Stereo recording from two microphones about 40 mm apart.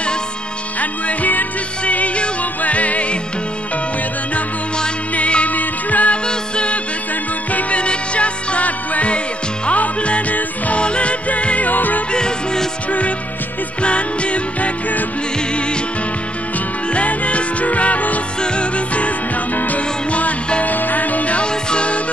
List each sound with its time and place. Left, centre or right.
0.7 s music: left
5.1 s music: left
6.2 s music: left
12.1 s music: centre
13.8 s music: left
16.9 s music: left
20.6 s music: left